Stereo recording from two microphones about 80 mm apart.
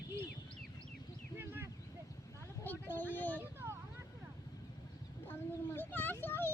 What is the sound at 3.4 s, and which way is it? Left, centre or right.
Vehicle, right.